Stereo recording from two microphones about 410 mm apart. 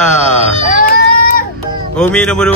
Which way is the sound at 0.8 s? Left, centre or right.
Left.